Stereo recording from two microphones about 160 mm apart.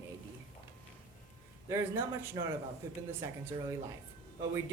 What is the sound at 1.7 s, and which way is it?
Speech, 15° right (ahead or behind).